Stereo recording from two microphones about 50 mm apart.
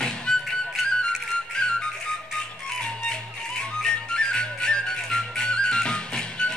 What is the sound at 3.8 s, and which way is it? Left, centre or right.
Music, centre.